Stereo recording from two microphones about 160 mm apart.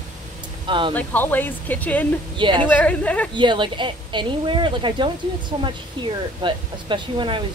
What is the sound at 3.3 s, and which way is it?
Speech, 30° right (ahead or behind).